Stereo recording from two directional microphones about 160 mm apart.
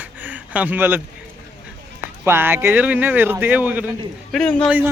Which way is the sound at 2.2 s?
15° right (ahead or behind).